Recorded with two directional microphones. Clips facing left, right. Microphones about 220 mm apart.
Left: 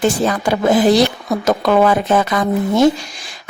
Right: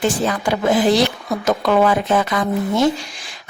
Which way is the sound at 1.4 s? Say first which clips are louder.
Left 2 dB; 45° left (ahead or behind).